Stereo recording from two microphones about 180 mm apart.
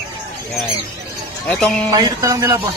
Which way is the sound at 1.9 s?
20° right (ahead or behind).